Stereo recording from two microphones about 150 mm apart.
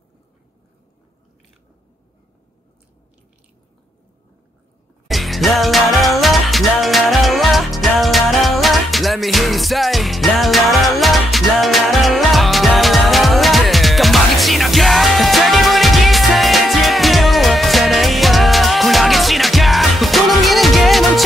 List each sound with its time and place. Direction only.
5.0 s music: centre (ahead or behind)